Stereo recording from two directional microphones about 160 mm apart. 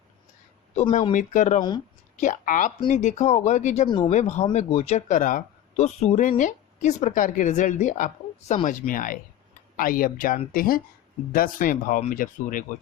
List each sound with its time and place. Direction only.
0.8 s speech: 45° left (ahead or behind)
3.8 s speech: 30° left (ahead or behind)
4.1 s speech: 45° left (ahead or behind)